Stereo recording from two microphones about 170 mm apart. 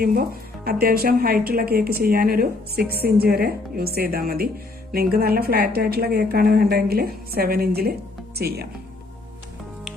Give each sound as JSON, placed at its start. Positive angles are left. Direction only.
{"t": 0.0, "sound": "a woman's voice", "side_deg": -60}